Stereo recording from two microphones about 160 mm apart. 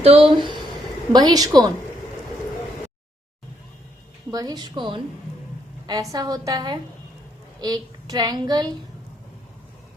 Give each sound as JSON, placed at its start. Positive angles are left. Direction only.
{"t": 0.0, "sound": "a woman's voice", "side_deg": -35}
{"t": 4.3, "sound": "a woman's voice", "side_deg": -25}